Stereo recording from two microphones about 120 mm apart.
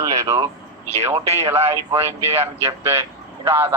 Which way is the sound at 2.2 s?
25° right (ahead or behind).